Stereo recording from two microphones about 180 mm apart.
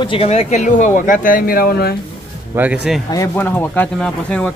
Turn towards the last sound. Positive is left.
turn(degrees=5)  # may be behind; listen again after turning